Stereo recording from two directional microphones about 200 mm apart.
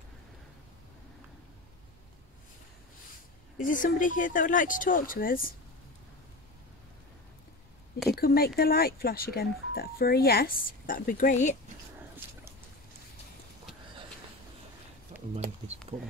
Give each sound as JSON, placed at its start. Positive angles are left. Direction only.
{"t": 3.5, "sound": "speech", "side_deg": 40}
{"t": 8.1, "sound": "speech", "side_deg": 50}
{"t": 15.9, "sound": "speech", "side_deg": -30}